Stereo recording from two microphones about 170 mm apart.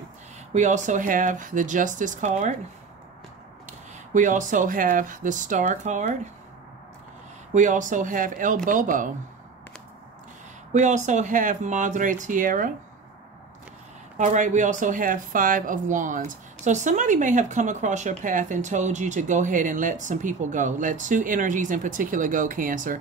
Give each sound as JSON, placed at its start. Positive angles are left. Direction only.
{"t": 0.5, "sound": "speech", "side_deg": -45}
{"t": 4.1, "sound": "speech", "side_deg": -45}
{"t": 7.5, "sound": "speech", "side_deg": -45}
{"t": 10.7, "sound": "speech", "side_deg": -45}
{"t": 14.1, "sound": "speech", "side_deg": -45}